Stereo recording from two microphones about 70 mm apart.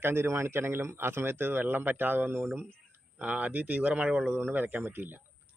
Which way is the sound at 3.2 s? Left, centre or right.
Centre.